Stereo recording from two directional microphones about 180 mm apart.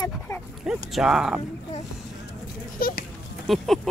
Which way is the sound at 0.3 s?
20° left (ahead or behind).